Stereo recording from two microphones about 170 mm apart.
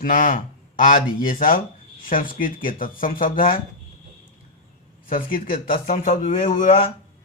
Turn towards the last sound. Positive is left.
turn(degrees=50)  # may be behind; listen again after turning